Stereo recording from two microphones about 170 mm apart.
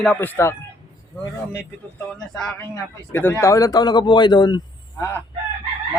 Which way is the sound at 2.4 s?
10° left (ahead or behind).